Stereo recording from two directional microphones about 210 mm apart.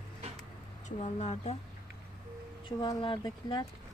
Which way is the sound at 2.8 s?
25° left (ahead or behind).